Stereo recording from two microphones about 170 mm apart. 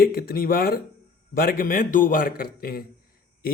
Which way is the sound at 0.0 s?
60° left (ahead or behind).